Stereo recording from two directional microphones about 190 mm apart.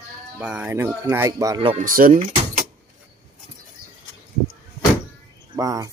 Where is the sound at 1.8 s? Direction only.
45° right (ahead or behind).